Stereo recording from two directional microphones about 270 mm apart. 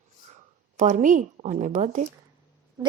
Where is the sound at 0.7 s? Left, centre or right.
Right.